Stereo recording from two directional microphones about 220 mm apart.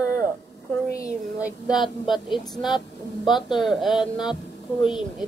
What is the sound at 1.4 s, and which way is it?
Speech, centre (ahead or behind).